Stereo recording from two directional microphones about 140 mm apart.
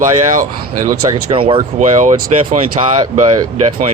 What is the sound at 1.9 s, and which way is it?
Speech, 60° right (ahead or behind).